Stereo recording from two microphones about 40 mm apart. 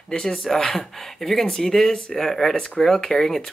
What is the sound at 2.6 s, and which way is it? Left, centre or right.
Speech, centre.